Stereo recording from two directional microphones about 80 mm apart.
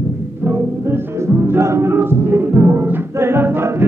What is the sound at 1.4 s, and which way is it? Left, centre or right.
Music, right.